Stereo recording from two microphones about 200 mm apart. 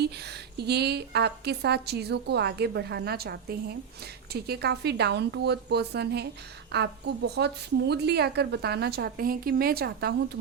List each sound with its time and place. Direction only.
0.0 s a woman's voice: 55° right (ahead or behind)